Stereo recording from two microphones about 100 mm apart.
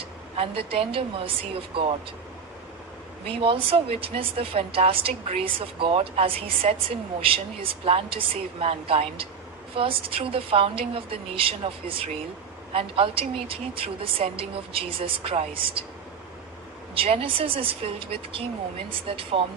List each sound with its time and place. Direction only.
0.3 s speech: 70° right (ahead or behind)
3.2 s speech: 65° right (ahead or behind)
7.2 s speech: 65° right (ahead or behind)
16.9 s speech: 70° right (ahead or behind)